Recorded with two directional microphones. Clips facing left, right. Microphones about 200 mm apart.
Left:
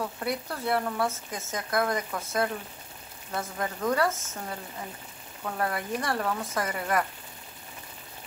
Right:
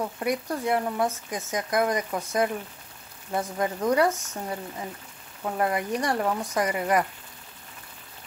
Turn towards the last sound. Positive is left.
turn(degrees=-15)  # may be behind; listen again after turning